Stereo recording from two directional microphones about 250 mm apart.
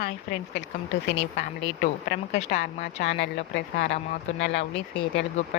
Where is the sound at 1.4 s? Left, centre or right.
Left.